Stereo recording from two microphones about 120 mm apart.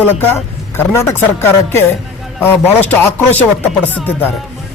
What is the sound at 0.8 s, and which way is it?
A man's voice, 20° left (ahead or behind).